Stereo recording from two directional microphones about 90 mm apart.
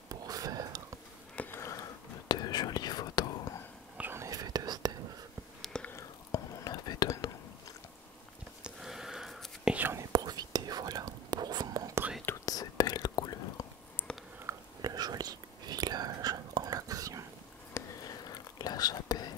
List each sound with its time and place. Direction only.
0.1 s whispering: 45° right (ahead or behind)
1.3 s sniff: 15° left (ahead or behind)
1.6 s sniff: 35° left (ahead or behind)
2.2 s whispering: 50° left (ahead or behind)
4.2 s whispering: 40° right (ahead or behind)
5.6 s whispering: 10° left (ahead or behind)
5.9 s whispering: 40° left (ahead or behind)
8.6 s sniff: 5° right (ahead or behind)
9.7 s whispering: 20° right (ahead or behind)
9.9 s whispering: 45° right (ahead or behind)
12.4 s whispering: 45° left (ahead or behind)
14.0 s a sound: 20° left (ahead or behind)
14.8 s whispering: 45° right (ahead or behind)
18.0 s whispering: 45° left (ahead or behind)